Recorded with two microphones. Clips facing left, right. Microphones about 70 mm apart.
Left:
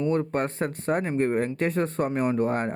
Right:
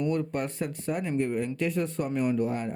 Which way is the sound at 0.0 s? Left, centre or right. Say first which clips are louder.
Left 4 dB; left.